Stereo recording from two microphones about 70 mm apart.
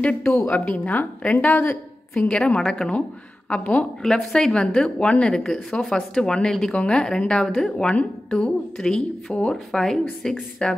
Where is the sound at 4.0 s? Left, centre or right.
Centre.